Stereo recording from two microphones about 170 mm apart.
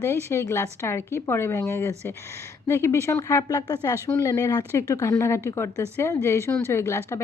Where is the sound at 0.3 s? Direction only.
15° left (ahead or behind).